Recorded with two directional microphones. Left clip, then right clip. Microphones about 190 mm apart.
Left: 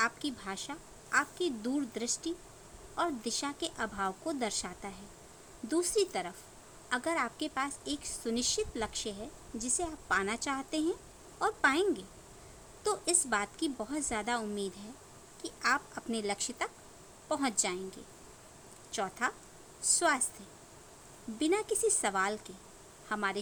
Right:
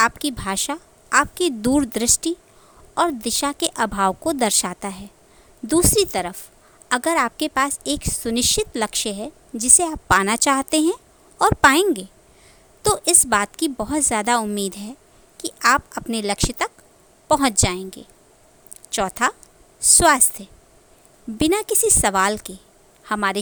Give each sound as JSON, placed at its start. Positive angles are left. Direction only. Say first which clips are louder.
{"t": 0.0, "sound": "a woman's voice", "louder": "right 14 dB", "side_deg": -55}
{"t": 21.3, "sound": "a woman's voice", "louder": "right 11 dB", "side_deg": -55}